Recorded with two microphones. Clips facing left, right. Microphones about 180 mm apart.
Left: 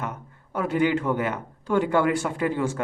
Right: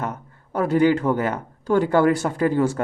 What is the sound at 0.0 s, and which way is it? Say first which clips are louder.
Speech: right 4 dB; 40° right (ahead or behind).